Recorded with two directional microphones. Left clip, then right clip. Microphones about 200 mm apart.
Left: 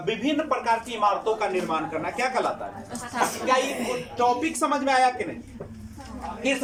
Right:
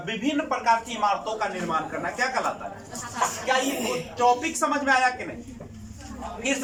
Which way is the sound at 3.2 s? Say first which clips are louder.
Left 1 dB; 40° left (ahead or behind).